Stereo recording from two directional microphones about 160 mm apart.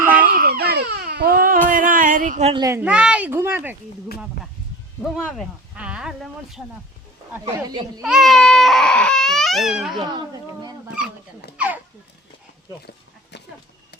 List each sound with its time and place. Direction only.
0.0 s baby cry: 10° right (ahead or behind)
0.3 s baby cry: 70° right (ahead or behind)
1.7 s a sound: 60° right (ahead or behind)
2.5 s speech: 25° right (ahead or behind)
2.8 s speech: 5° right (ahead or behind)
5.0 s baby cry: centre (ahead or behind)
8.0 s baby cry: centre (ahead or behind)
10.0 s speech: 25° right (ahead or behind)
11.5 s speech: 10° right (ahead or behind)